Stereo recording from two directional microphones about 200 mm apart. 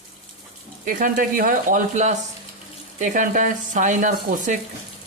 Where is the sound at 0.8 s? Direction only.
45° right (ahead or behind).